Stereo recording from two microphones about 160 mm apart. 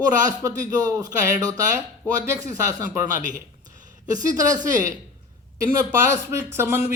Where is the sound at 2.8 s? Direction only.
55° right (ahead or behind).